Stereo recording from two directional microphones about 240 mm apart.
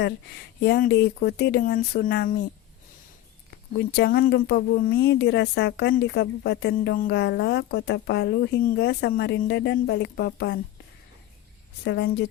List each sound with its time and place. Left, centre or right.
0.6 s speech: left
3.5 s speech: left
11.9 s speech: left